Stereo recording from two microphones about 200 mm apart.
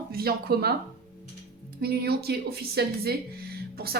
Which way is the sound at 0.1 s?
50° right (ahead or behind).